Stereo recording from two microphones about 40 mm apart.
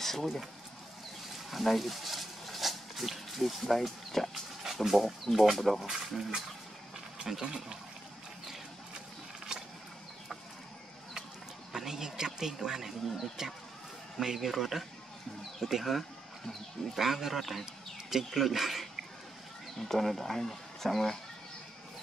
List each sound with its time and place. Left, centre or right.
0.0 s a sound: centre
1.5 s speech: centre
7.4 s speech: centre
11.7 s speech: centre
19.8 s speech: centre